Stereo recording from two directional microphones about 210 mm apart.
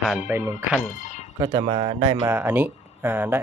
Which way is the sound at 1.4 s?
20° right (ahead or behind).